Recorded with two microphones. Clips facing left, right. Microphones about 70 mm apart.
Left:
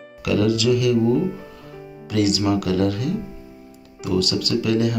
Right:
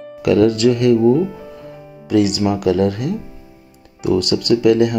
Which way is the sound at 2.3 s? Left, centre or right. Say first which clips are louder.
Right 4 dB; right.